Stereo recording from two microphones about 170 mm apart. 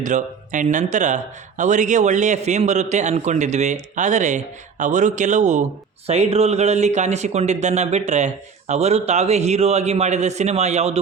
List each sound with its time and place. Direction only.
0.0 s speech: 45° right (ahead or behind)